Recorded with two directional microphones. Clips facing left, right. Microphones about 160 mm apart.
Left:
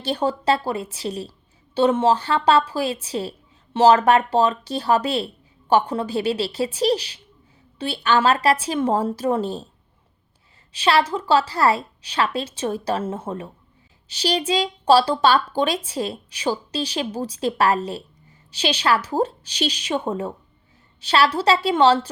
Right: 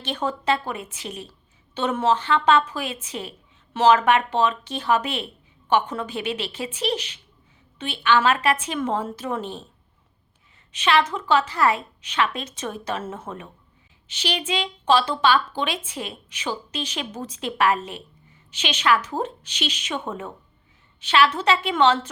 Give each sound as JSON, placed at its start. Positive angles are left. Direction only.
{"t": 0.0, "sound": "speech", "side_deg": 35}
{"t": 10.7, "sound": "speech", "side_deg": 35}